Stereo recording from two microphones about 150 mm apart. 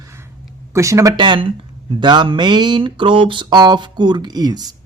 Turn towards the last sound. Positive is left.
turn(degrees=-25)  # may be behind; listen again after turning